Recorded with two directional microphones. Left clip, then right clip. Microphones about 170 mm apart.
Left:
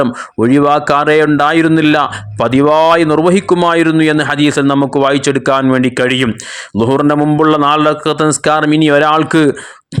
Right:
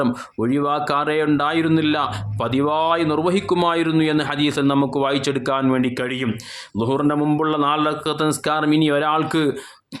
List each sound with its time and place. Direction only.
0.3 s a man's voice: 35° left (ahead or behind)